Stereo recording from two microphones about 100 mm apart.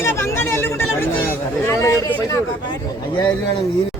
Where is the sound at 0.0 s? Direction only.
25° left (ahead or behind).